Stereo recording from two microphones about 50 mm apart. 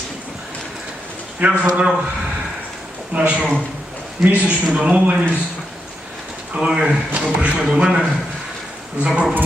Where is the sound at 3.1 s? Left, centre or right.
Right.